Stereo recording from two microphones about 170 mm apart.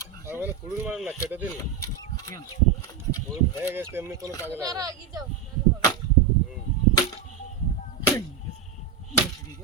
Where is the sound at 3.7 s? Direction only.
15° right (ahead or behind).